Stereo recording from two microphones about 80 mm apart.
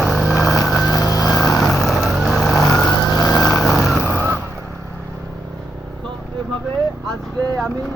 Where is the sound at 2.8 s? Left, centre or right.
Left.